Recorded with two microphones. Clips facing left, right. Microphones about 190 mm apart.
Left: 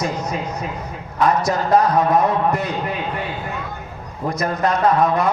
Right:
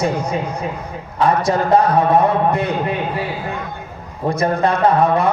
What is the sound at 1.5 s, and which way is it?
A man's voice, 30° right (ahead or behind).